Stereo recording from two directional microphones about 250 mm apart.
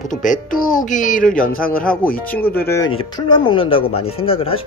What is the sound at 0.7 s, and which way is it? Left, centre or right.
Speech, left.